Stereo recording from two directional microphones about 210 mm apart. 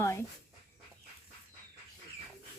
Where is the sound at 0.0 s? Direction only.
15° left (ahead or behind).